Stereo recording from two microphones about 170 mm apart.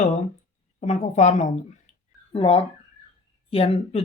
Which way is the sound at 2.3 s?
30° left (ahead or behind).